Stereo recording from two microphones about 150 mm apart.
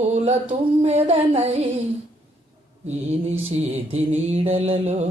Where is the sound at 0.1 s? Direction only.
45° right (ahead or behind).